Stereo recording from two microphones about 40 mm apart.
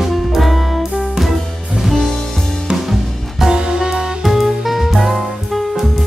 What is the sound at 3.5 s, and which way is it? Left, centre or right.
Music, centre.